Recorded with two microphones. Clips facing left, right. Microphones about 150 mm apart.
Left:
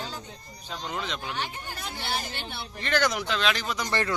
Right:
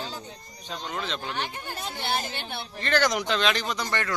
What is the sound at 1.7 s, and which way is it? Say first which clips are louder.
Speech: right 4 dB; 20° right (ahead or behind).